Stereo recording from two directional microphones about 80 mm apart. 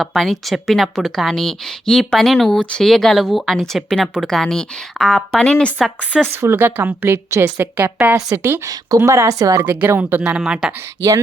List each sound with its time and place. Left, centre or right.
0.0 s speech: centre
6.2 s a woman's voice: right
7.6 s a woman's voice: right
8.1 s a woman's voice: right
9.6 s a woman's voice: right
10.3 s speech: centre
11.0 s a woman's voice: right